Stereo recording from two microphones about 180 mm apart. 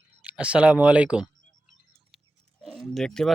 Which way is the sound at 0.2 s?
5° right (ahead or behind).